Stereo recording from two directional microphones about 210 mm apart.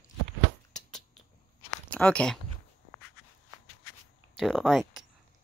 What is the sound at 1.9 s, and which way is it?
Speech, 5° left (ahead or behind).